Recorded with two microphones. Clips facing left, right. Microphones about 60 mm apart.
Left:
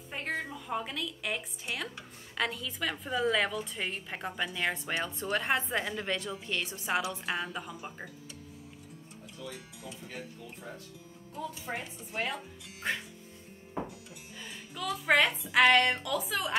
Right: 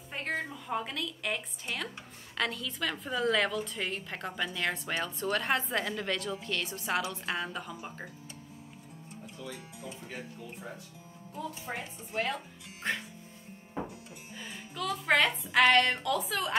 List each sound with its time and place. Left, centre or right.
0.1 s a woman's voice: centre
7.0 s a woman's voice: centre
10.0 s speech: centre
12.9 s a woman's voice: centre
14.8 s a woman's voice: centre